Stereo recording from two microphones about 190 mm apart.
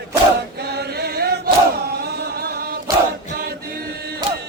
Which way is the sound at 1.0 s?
55° right (ahead or behind).